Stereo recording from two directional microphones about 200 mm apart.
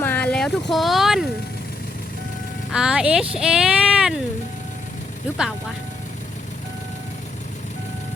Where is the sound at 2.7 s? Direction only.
5° right (ahead or behind).